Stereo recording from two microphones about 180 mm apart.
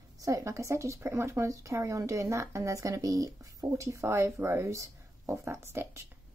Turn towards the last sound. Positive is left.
turn(degrees=-15)  # may be behind; listen again after turning